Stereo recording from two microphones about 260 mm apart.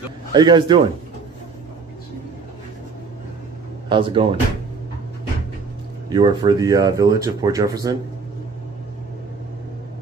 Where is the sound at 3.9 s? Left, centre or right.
Centre.